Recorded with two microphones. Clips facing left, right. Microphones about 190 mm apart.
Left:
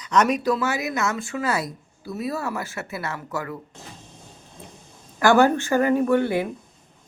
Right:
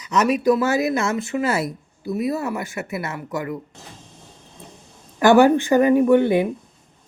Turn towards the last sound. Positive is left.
turn(degrees=-20)  # may be behind; listen again after turning